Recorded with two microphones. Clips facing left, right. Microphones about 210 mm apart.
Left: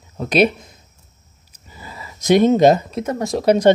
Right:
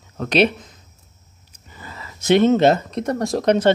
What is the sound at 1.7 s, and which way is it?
Speech, 10° left (ahead or behind).